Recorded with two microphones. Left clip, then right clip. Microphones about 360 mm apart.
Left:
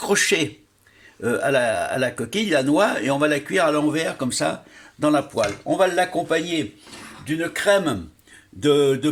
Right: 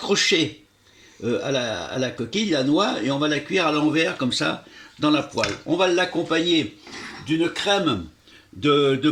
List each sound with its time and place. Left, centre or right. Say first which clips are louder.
0.0 s speech: even; left
7.6 s speech: left 5 dB; left
8.7 s mantra: left 1 dB; centre